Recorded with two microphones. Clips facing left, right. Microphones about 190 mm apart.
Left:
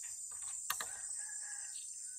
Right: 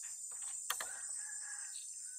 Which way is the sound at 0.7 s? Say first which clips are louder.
Even; 20° right (ahead or behind).